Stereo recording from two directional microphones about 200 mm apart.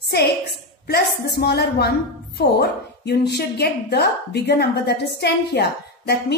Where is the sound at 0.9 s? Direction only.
55° left (ahead or behind).